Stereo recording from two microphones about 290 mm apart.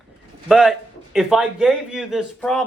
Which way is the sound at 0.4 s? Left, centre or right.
Centre.